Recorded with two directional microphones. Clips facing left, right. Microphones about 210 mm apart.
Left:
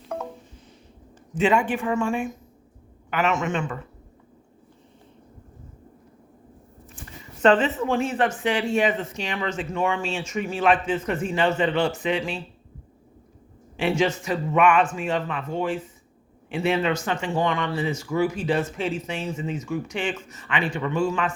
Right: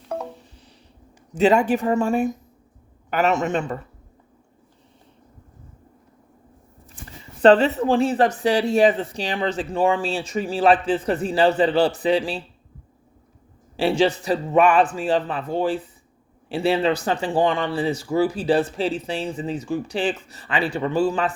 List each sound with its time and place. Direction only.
1.4 s speech: 40° right (ahead or behind)
7.4 s speech: 35° right (ahead or behind)
13.7 s speech: 35° right (ahead or behind)